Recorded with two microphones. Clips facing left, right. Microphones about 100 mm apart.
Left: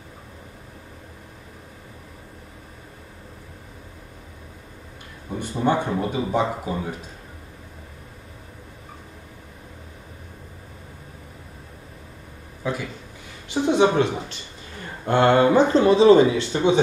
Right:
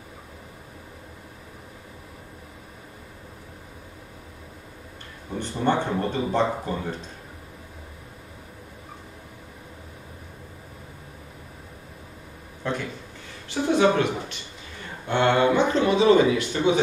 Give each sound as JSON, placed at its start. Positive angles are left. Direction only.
{"t": 5.3, "sound": "speech", "side_deg": 10}
{"t": 12.6, "sound": "speech", "side_deg": 5}
{"t": 13.5, "sound": "a woman's voice", "side_deg": 20}
{"t": 15.0, "sound": "speech", "side_deg": 40}